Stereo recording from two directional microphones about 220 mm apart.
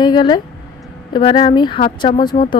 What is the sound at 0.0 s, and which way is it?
Speech, 20° left (ahead or behind).